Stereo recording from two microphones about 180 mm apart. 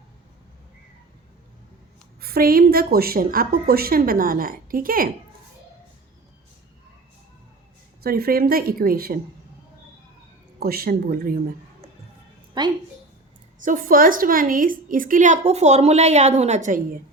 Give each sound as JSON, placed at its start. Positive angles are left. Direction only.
{"t": 2.2, "sound": "a woman's voice", "side_deg": -55}
{"t": 8.0, "sound": "a woman's voice", "side_deg": -55}
{"t": 10.6, "sound": "a woman's voice", "side_deg": -55}
{"t": 12.6, "sound": "a woman's voice", "side_deg": -25}
{"t": 13.7, "sound": "a woman's voice", "side_deg": -50}